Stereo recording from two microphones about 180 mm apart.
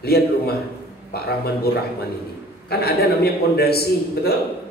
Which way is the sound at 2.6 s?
60° left (ahead or behind).